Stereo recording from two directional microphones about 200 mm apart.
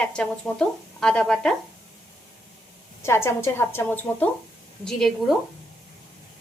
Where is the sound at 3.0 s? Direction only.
15° left (ahead or behind).